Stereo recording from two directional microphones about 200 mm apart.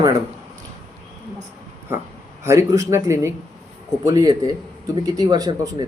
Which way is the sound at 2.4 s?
15° right (ahead or behind).